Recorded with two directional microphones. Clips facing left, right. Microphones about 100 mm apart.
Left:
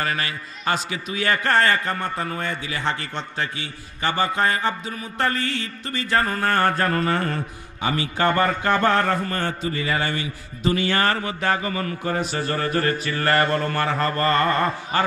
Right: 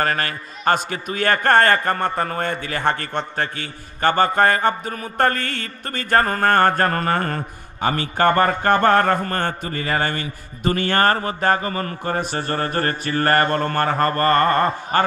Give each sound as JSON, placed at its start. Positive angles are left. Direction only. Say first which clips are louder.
{"t": 0.0, "sound": "a man's voice", "louder": "right 4 dB", "side_deg": -45}